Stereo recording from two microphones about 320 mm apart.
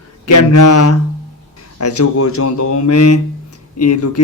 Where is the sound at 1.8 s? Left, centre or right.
Left.